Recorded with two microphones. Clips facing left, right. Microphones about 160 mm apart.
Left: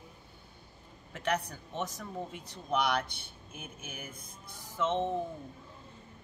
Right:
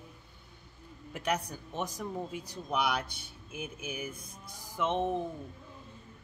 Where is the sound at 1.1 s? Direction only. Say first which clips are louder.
Even; 10° right (ahead or behind).